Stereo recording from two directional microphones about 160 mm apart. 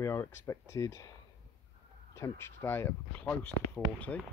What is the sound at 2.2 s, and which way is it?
Speech, 15° left (ahead or behind).